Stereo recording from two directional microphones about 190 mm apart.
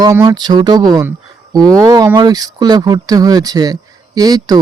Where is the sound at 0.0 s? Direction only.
20° right (ahead or behind).